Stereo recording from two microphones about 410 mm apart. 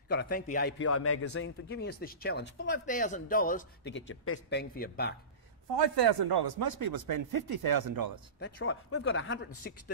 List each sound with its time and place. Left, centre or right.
0.1 s a man's voice: left
5.8 s speech: right
8.5 s a man's voice: left